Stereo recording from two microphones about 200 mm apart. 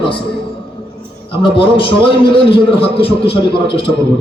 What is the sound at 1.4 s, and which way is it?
A man's voice, 25° left (ahead or behind).